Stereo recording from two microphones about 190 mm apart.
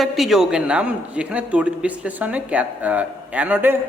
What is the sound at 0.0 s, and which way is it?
A man's voice, centre (ahead or behind).